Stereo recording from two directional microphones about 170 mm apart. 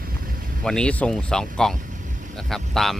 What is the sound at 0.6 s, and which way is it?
Speech, 5° left (ahead or behind).